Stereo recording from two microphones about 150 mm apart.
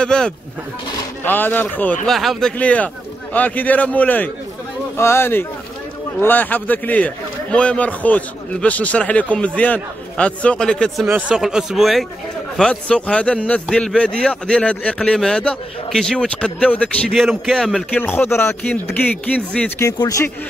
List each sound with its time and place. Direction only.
0.0 s a man's voice: 5° left (ahead or behind)
2.0 s a man's voice: centre (ahead or behind)
11.1 s a man's voice: 10° right (ahead or behind)
18.0 s a man's voice: 15° left (ahead or behind)
19.8 s speech: 25° left (ahead or behind)